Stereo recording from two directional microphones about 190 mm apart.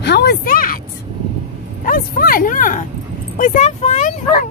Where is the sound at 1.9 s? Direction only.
50° left (ahead or behind).